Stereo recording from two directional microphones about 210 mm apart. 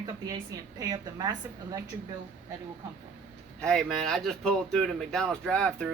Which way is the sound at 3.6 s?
5° left (ahead or behind).